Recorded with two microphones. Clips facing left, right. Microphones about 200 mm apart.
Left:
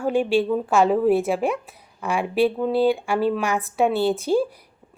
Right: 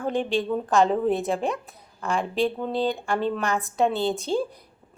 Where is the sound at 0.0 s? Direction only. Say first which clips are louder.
Left 5 dB; 10° left (ahead or behind).